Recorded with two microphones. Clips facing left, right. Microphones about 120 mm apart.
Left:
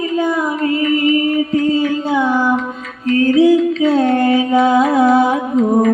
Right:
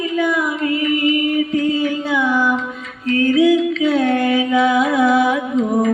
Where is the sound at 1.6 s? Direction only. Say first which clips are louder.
Left 3 dB; 40° left (ahead or behind).